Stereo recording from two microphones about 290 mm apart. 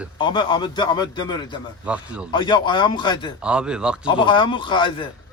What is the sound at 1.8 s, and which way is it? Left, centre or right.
Speech, centre.